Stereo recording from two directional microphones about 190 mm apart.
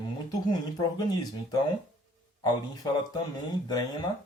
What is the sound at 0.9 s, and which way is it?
Speech, 20° left (ahead or behind).